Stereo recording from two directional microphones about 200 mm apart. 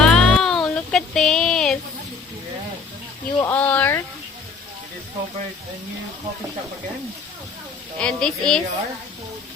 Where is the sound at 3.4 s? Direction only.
10° left (ahead or behind).